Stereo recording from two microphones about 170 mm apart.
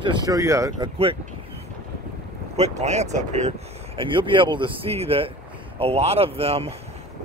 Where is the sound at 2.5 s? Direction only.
40° right (ahead or behind).